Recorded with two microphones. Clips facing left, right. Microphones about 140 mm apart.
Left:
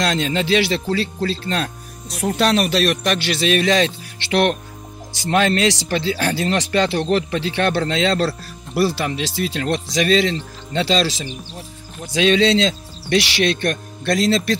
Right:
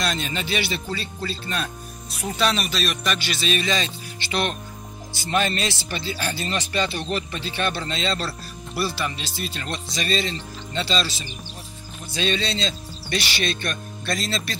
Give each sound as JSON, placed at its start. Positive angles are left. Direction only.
{"t": 0.0, "sound": "music", "side_deg": 85}
{"t": 8.7, "sound": "speech", "side_deg": 85}